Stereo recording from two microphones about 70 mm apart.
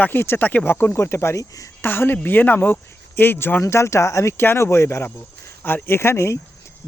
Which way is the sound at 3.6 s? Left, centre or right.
Left.